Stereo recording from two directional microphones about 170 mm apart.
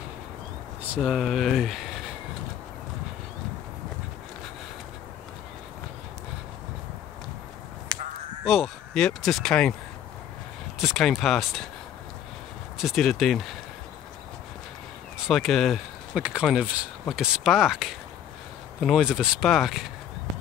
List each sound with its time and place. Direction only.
0.9 s speech: 5° right (ahead or behind)
7.9 s a sound: 25° right (ahead or behind)
8.5 s speech: centre (ahead or behind)
10.8 s speech: centre (ahead or behind)
12.7 s speech: centre (ahead or behind)
15.1 s speech: centre (ahead or behind)